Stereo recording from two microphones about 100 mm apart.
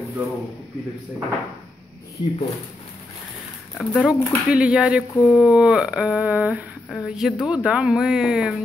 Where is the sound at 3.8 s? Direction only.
Centre (ahead or behind).